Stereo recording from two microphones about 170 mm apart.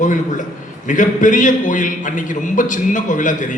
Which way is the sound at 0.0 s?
50° left (ahead or behind).